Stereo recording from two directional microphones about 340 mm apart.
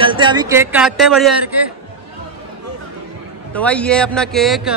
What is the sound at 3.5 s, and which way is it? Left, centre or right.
A man's voice, centre.